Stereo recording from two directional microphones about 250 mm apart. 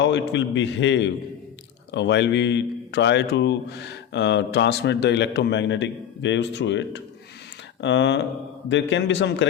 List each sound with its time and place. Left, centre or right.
0.0 s speech: left